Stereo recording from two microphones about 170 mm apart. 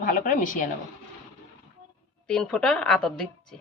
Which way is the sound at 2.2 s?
5° left (ahead or behind).